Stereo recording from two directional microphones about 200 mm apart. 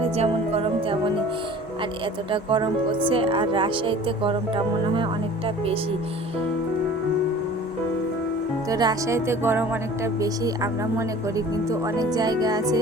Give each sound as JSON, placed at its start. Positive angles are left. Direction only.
{"t": 0.2, "sound": "music", "side_deg": -30}
{"t": 2.3, "sound": "speech", "side_deg": -25}
{"t": 8.7, "sound": "speech", "side_deg": -20}